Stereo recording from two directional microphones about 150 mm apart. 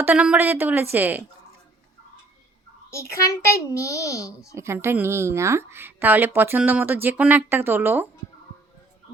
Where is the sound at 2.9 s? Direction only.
20° left (ahead or behind).